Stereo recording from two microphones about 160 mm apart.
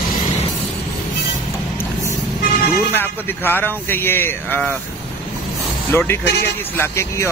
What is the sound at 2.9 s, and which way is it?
Speech, 15° left (ahead or behind).